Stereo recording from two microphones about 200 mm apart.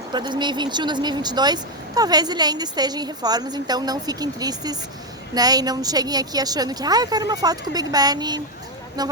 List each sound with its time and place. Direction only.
0.1 s speech: 20° right (ahead or behind)